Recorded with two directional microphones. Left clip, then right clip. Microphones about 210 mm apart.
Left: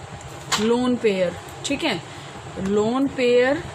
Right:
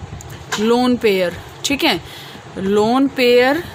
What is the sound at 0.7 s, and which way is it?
Speech, 55° right (ahead or behind).